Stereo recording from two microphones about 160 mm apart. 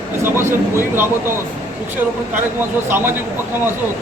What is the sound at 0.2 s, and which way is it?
Speech, 15° right (ahead or behind).